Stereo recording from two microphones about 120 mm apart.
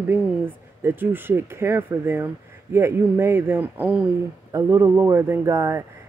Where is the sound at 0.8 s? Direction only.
15° right (ahead or behind).